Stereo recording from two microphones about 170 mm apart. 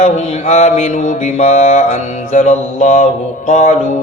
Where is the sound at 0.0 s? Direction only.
40° left (ahead or behind).